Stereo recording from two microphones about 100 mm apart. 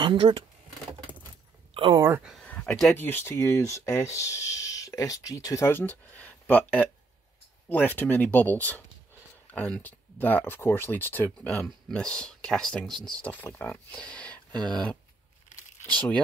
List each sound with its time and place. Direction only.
0.0 s speech: 60° right (ahead or behind)
1.7 s a sound: 55° right (ahead or behind)
2.0 s speech: 25° right (ahead or behind)
2.4 s a sound: 15° left (ahead or behind)
2.9 s speech: 20° left (ahead or behind)
5.7 s speech: 15° left (ahead or behind)